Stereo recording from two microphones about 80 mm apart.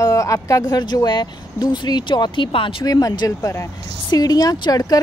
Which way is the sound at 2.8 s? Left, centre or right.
Left.